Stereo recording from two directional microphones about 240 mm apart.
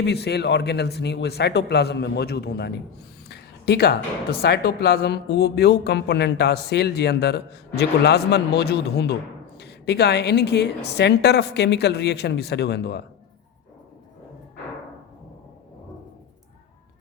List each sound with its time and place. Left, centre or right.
0.0 s speech: left